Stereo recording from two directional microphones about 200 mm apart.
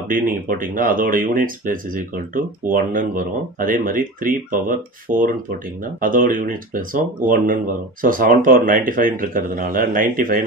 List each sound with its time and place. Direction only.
0.1 s speech: 45° right (ahead or behind)